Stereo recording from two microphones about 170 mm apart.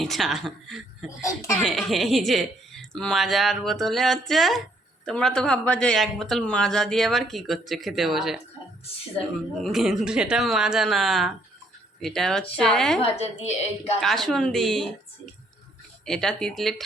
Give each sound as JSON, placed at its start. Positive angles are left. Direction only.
{"t": 0.0, "sound": "speech", "side_deg": 0}
{"t": 1.2, "sound": "speech", "side_deg": 15}
{"t": 1.6, "sound": "speech", "side_deg": 0}
{"t": 9.6, "sound": "speech", "side_deg": 0}
{"t": 13.0, "sound": "a woman's voice", "side_deg": 35}
{"t": 14.0, "sound": "speech", "side_deg": 0}
{"t": 16.0, "sound": "speech", "side_deg": 5}